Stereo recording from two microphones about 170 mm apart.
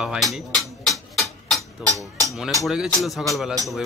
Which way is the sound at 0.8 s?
Centre (ahead or behind).